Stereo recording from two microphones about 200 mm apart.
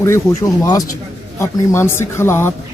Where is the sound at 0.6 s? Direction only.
15° left (ahead or behind).